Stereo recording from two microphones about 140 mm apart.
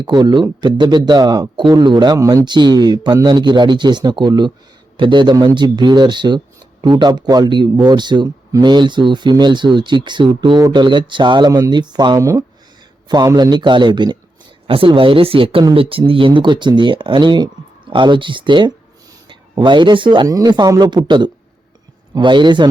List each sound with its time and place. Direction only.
0.0 s a man's voice: 30° right (ahead or behind)